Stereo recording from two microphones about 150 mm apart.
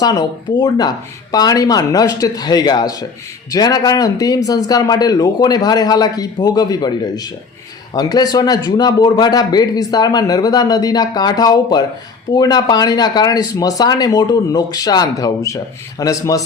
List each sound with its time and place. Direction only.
0.0 s a man's voice: 25° left (ahead or behind)